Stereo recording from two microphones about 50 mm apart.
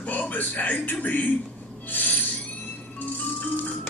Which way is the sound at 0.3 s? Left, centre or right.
Left.